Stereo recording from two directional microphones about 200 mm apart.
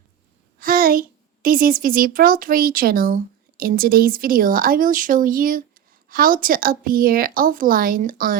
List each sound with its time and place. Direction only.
0.6 s a child's voice: 45° right (ahead or behind)